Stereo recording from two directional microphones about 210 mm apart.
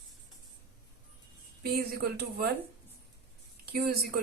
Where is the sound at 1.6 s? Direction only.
50° right (ahead or behind).